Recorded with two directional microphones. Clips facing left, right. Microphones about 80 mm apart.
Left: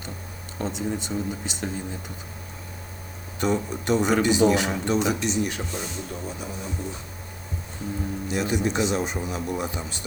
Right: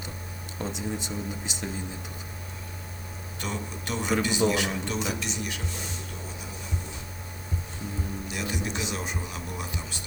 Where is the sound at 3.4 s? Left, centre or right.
Left.